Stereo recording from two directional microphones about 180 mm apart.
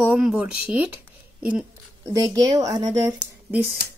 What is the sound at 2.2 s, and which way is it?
Speech, 20° right (ahead or behind).